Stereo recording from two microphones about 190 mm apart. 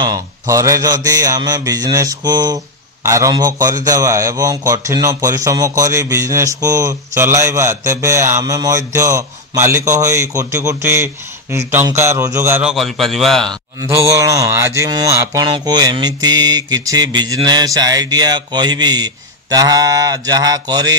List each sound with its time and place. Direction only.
0.0 s a man's voice: 20° right (ahead or behind)
12.7 s a man's voice: centre (ahead or behind)
13.7 s mantra: 15° right (ahead or behind)